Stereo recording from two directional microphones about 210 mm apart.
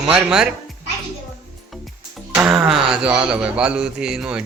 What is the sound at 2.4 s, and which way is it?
Speech, 5° right (ahead or behind).